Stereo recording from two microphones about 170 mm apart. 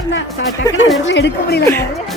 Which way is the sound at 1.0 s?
90° left.